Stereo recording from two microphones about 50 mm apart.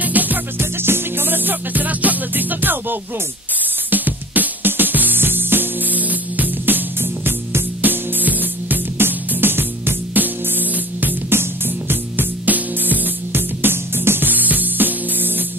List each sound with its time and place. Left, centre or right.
0.0 s music: right
0.6 s music: right